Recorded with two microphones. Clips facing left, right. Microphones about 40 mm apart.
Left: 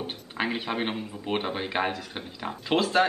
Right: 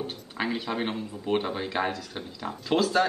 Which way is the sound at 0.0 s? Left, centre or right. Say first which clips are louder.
Left 1 dB; left.